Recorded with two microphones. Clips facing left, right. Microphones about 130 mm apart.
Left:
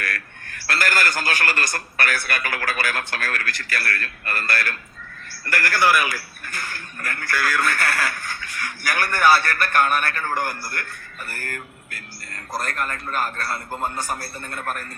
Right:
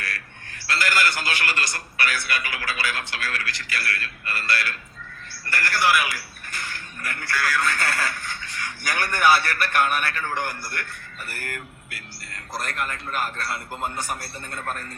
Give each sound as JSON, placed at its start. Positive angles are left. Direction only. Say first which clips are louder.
{"t": 0.0, "sound": "a man's voice", "louder": "left 4 dB", "side_deg": 50}